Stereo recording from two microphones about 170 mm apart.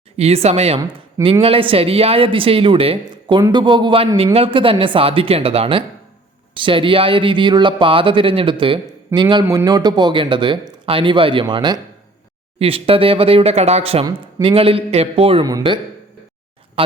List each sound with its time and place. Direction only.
0.2 s speech: 40° right (ahead or behind)